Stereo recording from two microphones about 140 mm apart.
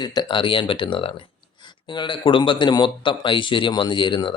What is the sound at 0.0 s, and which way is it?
Speech, 30° left (ahead or behind).